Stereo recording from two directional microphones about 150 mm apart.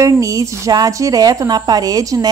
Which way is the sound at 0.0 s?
20° right (ahead or behind).